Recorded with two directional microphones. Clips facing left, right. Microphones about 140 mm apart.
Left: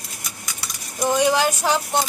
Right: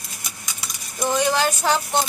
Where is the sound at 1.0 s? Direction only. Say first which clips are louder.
Left 2 dB; 15° left (ahead or behind).